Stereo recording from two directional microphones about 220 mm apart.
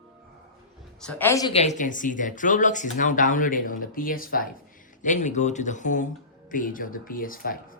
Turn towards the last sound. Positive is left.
turn(degrees=40)  # may be behind; listen again after turning